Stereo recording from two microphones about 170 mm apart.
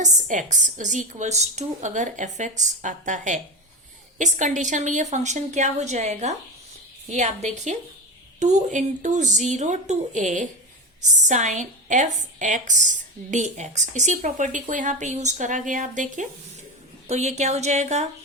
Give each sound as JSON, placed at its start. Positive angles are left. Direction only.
{"t": 0.0, "sound": "a woman's voice", "side_deg": -45}